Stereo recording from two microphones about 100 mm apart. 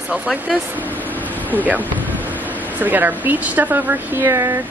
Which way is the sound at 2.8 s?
20° right (ahead or behind).